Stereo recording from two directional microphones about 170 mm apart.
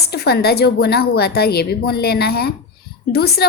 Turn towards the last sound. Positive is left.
turn(degrees=70)  # may be behind; listen again after turning